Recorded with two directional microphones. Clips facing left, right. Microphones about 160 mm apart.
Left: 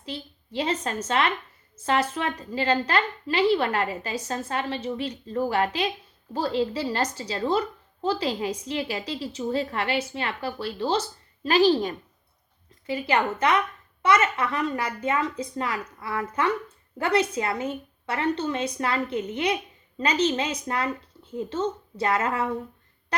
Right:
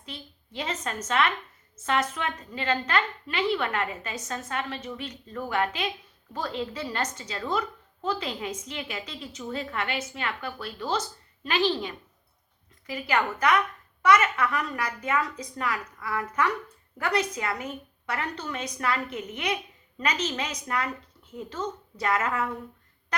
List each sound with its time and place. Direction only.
0.0 s a woman's voice: 30° left (ahead or behind)
12.9 s a woman's voice: 30° left (ahead or behind)